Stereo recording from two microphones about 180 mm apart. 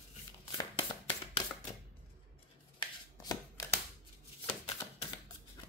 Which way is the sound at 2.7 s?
20° left (ahead or behind).